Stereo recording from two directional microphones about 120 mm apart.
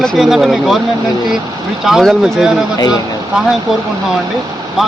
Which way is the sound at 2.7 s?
30° left (ahead or behind).